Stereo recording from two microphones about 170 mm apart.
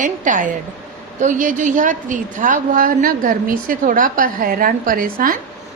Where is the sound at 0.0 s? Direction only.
50° right (ahead or behind).